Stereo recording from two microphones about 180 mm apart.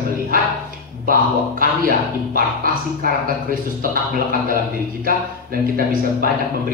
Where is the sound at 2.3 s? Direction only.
55° right (ahead or behind).